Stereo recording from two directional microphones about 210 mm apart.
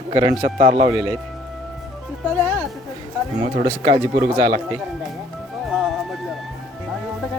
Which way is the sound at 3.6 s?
30° right (ahead or behind).